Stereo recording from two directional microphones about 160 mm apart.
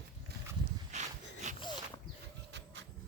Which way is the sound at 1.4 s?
45° right (ahead or behind).